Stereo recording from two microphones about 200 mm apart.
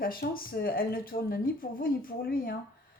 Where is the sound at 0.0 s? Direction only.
45° left (ahead or behind).